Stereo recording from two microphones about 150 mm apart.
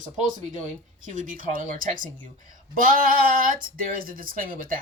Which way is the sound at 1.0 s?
60° right (ahead or behind).